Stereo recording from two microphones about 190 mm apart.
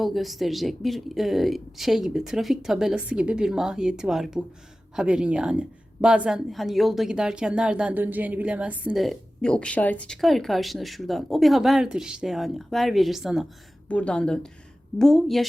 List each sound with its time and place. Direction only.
0.0 s speech: centre (ahead or behind)